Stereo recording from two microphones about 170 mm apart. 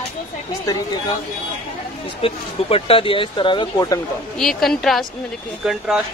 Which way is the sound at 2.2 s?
35° left (ahead or behind).